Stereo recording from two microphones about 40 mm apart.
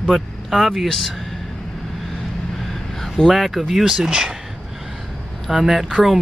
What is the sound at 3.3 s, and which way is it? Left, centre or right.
Speech, centre.